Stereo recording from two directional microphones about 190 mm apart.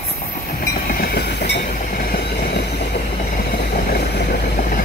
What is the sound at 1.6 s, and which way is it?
Train, 50° left (ahead or behind).